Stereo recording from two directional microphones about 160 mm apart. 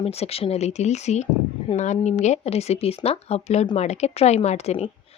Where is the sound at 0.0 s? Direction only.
40° left (ahead or behind).